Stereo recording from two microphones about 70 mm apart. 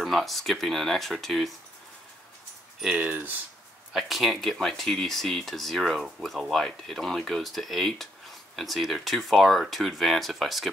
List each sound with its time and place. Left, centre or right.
0.0 s speech: centre
3.0 s speech: right
3.9 s speech: centre